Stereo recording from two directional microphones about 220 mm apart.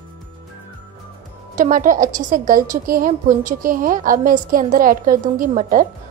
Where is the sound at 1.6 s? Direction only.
35° right (ahead or behind).